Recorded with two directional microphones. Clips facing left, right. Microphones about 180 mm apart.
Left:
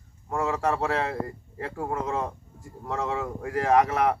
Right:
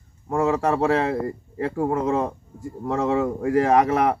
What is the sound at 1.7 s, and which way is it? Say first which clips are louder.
A man's voice: right 7 dB; 20° right (ahead or behind).